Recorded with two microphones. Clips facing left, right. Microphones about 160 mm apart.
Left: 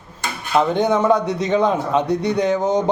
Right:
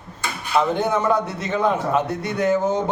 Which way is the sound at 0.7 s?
15° left (ahead or behind).